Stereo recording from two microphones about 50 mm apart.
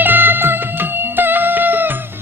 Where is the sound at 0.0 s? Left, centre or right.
Right.